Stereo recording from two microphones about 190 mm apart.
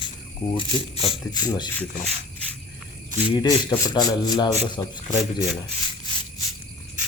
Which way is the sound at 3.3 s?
20° left (ahead or behind).